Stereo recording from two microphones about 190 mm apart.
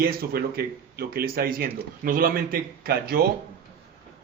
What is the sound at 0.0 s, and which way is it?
Speech, 55° right (ahead or behind).